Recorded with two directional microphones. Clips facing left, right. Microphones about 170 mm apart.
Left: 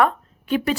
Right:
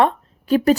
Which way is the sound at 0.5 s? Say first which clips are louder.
Right 6 dB; 40° right (ahead or behind).